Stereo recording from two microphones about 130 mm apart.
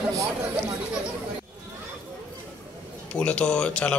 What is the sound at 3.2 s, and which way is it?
Speech, 10° left (ahead or behind).